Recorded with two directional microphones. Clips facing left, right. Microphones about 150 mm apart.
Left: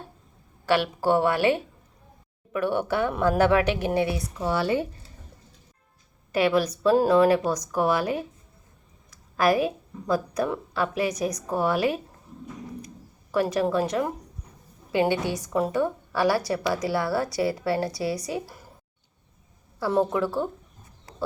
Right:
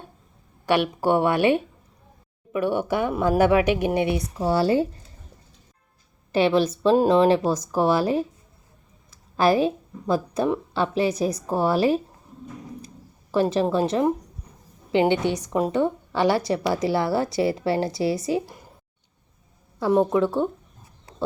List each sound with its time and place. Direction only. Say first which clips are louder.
0.6 s a woman's voice: right 2 dB; 20° right (ahead or behind)
4.4 s speech: right 4 dB; 35° right (ahead or behind)
6.3 s a woman's voice: right 3 dB; 25° right (ahead or behind)
13.3 s a woman's voice: right 2 dB; 25° right (ahead or behind)
19.8 s a woman's voice: right 4 dB; 20° right (ahead or behind)